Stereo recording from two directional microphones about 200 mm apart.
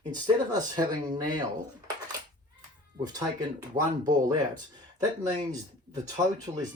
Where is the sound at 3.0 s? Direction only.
20° right (ahead or behind).